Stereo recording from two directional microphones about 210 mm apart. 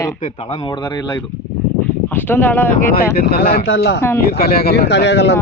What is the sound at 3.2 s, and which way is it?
Speech, 45° left (ahead or behind).